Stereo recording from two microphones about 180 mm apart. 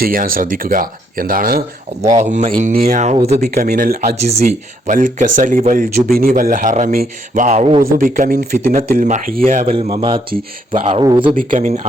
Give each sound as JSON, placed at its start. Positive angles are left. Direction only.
{"t": 0.0, "sound": "speech", "side_deg": -50}
{"t": 2.2, "sound": "speech", "side_deg": -35}
{"t": 3.4, "sound": "speech", "side_deg": -60}
{"t": 4.3, "sound": "speech", "side_deg": -40}
{"t": 7.4, "sound": "speech", "side_deg": -35}
{"t": 7.8, "sound": "speech", "side_deg": -50}
{"t": 11.3, "sound": "speech", "side_deg": -45}